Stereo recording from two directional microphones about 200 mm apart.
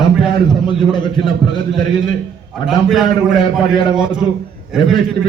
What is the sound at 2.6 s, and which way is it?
A man's voice, centre (ahead or behind).